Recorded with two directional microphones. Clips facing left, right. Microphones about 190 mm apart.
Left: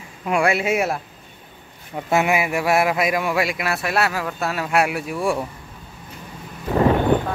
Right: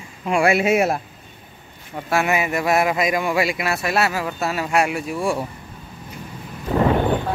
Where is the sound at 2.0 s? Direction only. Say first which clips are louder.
Left 2 dB; 20° left (ahead or behind).